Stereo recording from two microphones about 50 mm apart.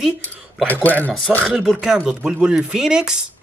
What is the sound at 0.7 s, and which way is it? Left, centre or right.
Speech, left.